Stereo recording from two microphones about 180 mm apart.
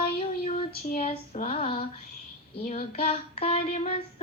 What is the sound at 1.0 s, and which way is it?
Female singing, 35° left (ahead or behind).